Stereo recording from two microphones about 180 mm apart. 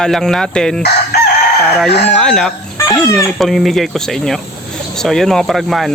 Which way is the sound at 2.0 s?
5° left (ahead or behind).